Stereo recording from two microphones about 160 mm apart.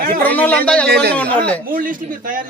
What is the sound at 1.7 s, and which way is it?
Speech, 60° right (ahead or behind).